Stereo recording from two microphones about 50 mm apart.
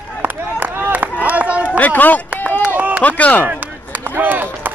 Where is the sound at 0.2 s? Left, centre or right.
Right.